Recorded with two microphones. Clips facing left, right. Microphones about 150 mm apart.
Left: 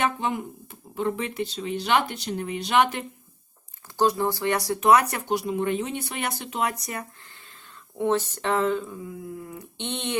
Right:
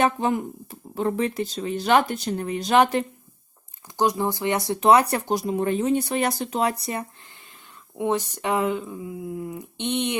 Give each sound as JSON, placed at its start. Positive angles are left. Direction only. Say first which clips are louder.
{"t": 0.0, "sound": "speech", "louder": "right 4 dB", "side_deg": -40}
{"t": 3.9, "sound": "speech", "louder": "even", "side_deg": -15}
{"t": 7.9, "sound": "speech", "louder": "even", "side_deg": -15}